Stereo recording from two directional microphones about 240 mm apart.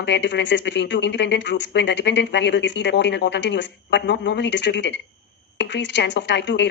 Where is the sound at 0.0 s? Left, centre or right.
Left.